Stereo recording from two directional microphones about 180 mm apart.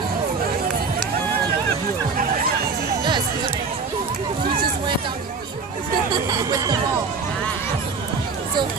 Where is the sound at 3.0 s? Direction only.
25° right (ahead or behind).